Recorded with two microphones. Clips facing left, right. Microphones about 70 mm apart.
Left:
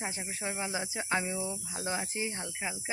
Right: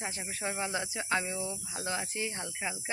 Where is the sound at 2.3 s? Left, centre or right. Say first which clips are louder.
Even; centre.